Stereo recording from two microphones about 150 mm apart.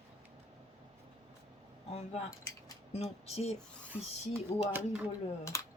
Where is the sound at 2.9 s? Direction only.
45° left (ahead or behind).